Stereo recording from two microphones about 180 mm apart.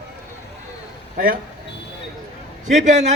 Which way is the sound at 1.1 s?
55° right (ahead or behind).